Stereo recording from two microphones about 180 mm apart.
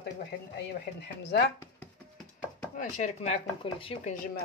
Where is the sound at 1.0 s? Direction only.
70° left (ahead or behind).